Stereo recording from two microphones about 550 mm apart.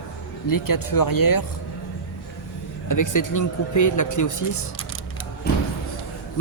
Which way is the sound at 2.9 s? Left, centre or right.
Left.